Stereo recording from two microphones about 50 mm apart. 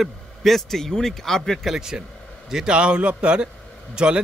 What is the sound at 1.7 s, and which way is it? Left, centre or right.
A man's voice, centre.